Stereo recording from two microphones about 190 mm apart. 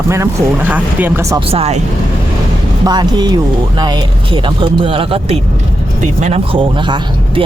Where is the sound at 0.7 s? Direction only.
10° right (ahead or behind).